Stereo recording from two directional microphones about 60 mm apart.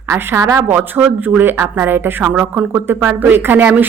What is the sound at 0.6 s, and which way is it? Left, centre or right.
Speech, right.